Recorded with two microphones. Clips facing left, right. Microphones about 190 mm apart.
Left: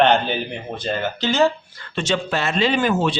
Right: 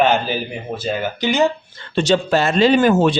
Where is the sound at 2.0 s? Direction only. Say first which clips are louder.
Right 6 dB; 35° right (ahead or behind).